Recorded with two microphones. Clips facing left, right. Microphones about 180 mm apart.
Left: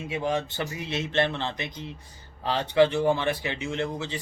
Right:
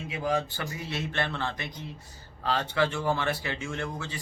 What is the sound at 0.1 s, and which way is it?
Speech, 25° left (ahead or behind).